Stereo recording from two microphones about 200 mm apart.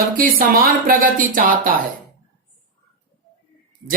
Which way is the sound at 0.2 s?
45° right (ahead or behind).